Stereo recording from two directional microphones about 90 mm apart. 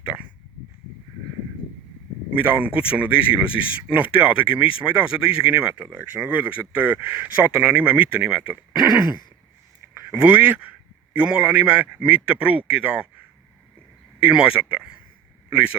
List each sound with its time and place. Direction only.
0.0 s a sound: 15° right (ahead or behind)
2.4 s speech: 15° right (ahead or behind)
10.1 s speech: 15° right (ahead or behind)
14.2 s a man's voice: 10° right (ahead or behind)